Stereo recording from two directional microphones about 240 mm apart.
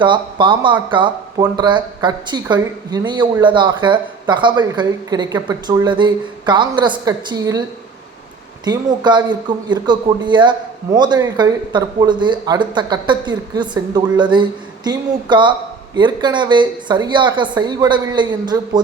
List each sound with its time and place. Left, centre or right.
0.0 s speech: centre
8.6 s a man's voice: centre